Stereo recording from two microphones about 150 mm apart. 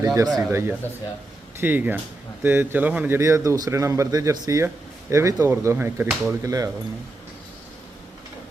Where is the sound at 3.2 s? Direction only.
20° right (ahead or behind).